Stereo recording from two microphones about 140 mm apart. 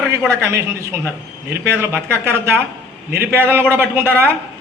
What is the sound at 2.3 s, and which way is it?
A man's voice, 20° right (ahead or behind).